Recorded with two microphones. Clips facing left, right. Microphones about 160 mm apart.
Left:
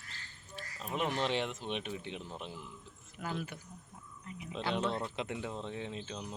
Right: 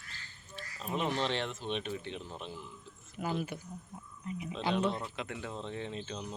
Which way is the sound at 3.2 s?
10° right (ahead or behind).